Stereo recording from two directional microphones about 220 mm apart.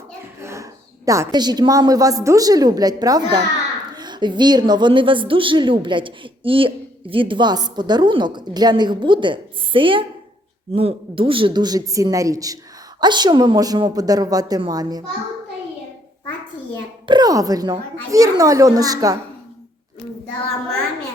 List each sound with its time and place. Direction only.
0.4 s a woman's voice: 15° right (ahead or behind)
17.1 s a woman's voice: 15° right (ahead or behind)